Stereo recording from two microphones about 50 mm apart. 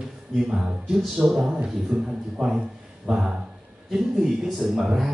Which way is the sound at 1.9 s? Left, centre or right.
Right.